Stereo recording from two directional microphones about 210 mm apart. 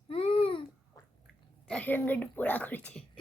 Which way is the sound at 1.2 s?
5° left (ahead or behind).